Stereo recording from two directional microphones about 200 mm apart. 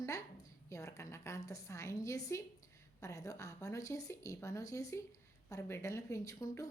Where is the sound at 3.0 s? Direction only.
15° left (ahead or behind).